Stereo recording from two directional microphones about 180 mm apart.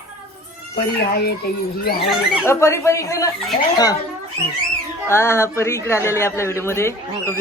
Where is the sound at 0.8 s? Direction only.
60° left (ahead or behind).